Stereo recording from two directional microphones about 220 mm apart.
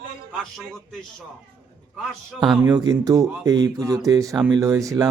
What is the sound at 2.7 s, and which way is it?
Speech, 15° right (ahead or behind).